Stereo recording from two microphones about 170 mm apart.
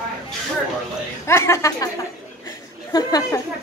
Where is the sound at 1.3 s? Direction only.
15° left (ahead or behind).